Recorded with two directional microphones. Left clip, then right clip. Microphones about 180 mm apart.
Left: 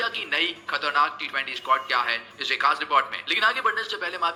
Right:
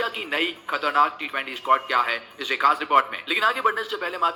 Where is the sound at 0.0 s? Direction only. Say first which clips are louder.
Even; 35° right (ahead or behind).